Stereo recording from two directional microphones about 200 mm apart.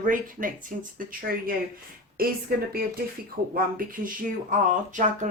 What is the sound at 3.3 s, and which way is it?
Speech, 45° right (ahead or behind).